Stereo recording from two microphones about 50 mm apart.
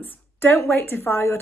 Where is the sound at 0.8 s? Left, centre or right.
Left.